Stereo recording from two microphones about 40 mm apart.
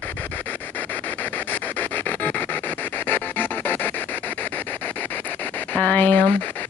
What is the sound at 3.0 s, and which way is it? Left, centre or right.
Music, left.